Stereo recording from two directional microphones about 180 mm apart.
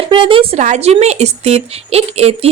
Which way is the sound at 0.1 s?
30° right (ahead or behind).